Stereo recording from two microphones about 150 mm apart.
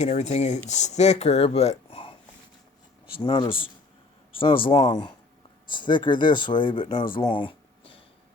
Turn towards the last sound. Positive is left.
turn(degrees=35)  # may be behind; listen again after turning